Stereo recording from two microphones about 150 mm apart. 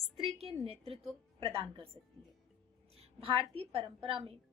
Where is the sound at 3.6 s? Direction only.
40° right (ahead or behind).